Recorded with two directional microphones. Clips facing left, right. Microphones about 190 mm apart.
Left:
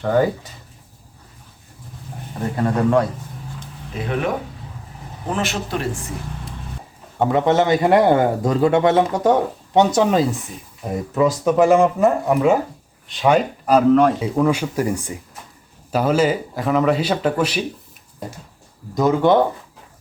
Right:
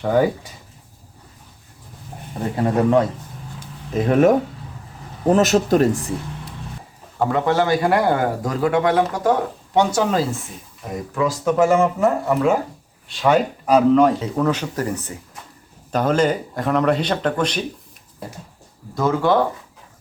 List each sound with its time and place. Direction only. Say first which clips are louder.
0.0 s speech: even; 10° right (ahead or behind)
2.6 s speech: right 1 dB; 20° right (ahead or behind)
3.9 s speech: right 8 dB; 45° right (ahead or behind)
7.2 s a man's voice: left 2 dB; 20° left (ahead or behind)
13.3 s speech: even; centre (ahead or behind)
18.9 s a man's voice: left 3 dB; 20° left (ahead or behind)